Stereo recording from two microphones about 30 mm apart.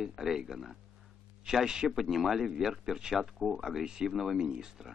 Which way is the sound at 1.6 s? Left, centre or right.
Right.